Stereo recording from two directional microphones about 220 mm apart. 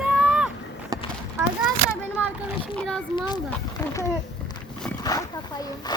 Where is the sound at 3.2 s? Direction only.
20° left (ahead or behind).